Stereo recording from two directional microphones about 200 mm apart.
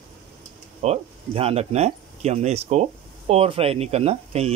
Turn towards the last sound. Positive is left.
turn(degrees=-30)  # may be behind; listen again after turning